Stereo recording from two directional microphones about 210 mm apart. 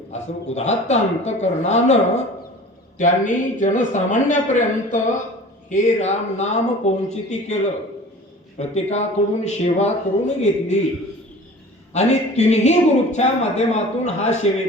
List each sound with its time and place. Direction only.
0.1 s speech: 30° left (ahead or behind)
3.0 s speech: 35° left (ahead or behind)
11.9 s speech: 30° left (ahead or behind)